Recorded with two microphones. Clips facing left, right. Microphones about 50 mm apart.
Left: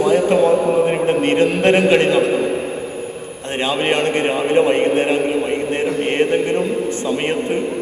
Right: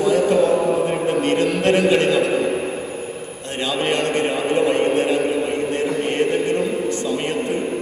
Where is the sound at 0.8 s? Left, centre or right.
Left.